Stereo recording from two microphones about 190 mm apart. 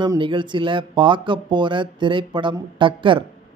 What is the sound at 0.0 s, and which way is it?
Speech, 25° right (ahead or behind).